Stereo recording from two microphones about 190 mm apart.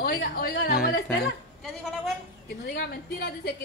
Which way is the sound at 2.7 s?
55° left (ahead or behind).